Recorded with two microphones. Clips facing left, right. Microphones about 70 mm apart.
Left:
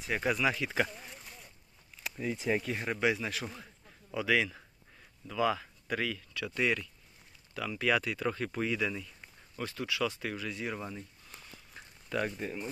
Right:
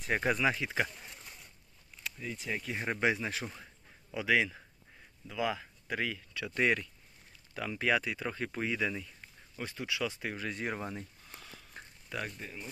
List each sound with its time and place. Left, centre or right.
0.2 s speech: right
2.0 s speech: left
2.7 s speech: right
6.5 s speech: right
10.4 s speech: right
11.8 s a sound: right
12.2 s speech: centre